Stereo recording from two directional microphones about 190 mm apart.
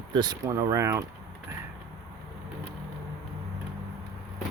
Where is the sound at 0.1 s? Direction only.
20° right (ahead or behind).